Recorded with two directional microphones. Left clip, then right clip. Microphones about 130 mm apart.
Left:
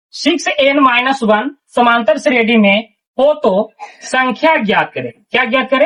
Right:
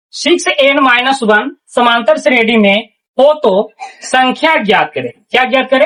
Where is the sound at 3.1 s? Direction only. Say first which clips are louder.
Right 3 dB; centre (ahead or behind).